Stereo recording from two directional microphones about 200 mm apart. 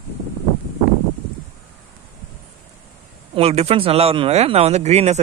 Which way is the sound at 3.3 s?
30° right (ahead or behind).